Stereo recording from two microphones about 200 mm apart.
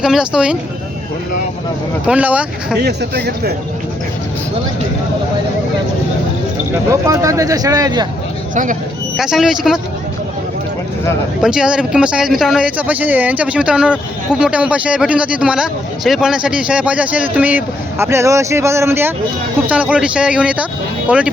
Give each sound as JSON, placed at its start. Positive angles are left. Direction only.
{"t": 0.0, "sound": "speech", "side_deg": -5}
{"t": 2.0, "sound": "speech", "side_deg": -5}
{"t": 2.7, "sound": "speech", "side_deg": -55}
{"t": 7.1, "sound": "a man's voice", "side_deg": -15}
{"t": 8.5, "sound": "speech", "side_deg": -40}
{"t": 9.1, "sound": "speech", "side_deg": 0}
{"t": 11.4, "sound": "a man's voice", "side_deg": -5}